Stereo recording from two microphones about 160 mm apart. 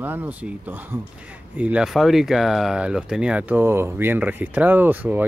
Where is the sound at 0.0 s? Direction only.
10° right (ahead or behind).